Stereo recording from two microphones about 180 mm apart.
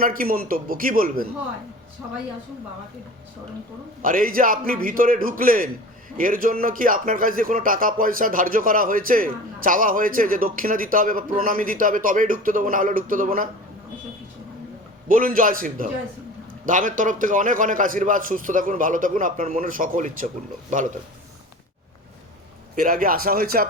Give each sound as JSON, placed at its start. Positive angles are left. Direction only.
{"t": 0.0, "sound": "speech", "side_deg": -50}
{"t": 4.0, "sound": "speech", "side_deg": -50}
{"t": 15.0, "sound": "speech", "side_deg": -50}
{"t": 22.7, "sound": "speech", "side_deg": -50}